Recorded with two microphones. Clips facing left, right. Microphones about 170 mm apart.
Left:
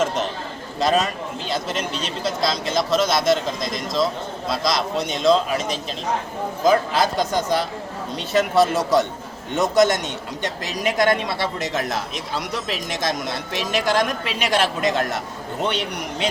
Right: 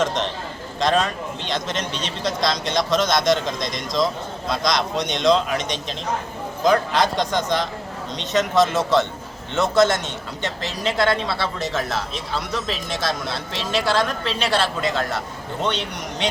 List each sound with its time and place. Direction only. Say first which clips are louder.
0.0 s a man's voice: even; 5° left (ahead or behind)